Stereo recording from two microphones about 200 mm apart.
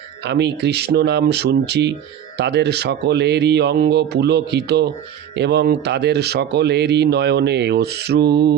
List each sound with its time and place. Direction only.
0.3 s speech: 60° right (ahead or behind)